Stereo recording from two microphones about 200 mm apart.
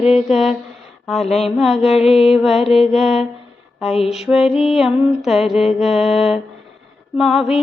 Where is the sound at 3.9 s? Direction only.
30° left (ahead or behind).